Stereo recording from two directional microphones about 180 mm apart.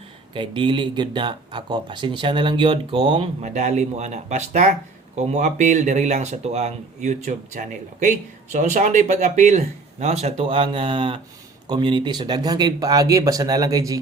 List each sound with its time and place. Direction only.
0.3 s speech: 25° right (ahead or behind)